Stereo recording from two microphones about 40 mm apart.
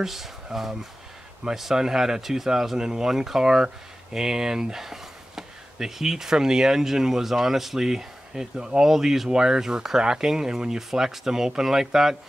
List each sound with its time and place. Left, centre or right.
0.0 s speech: centre